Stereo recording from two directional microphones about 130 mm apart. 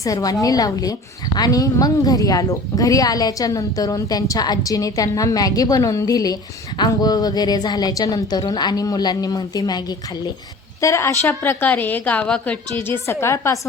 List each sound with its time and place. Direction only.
0.0 s a woman's voice: 25° left (ahead or behind)